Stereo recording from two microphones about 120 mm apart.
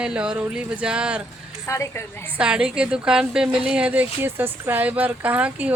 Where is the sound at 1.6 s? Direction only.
25° left (ahead or behind).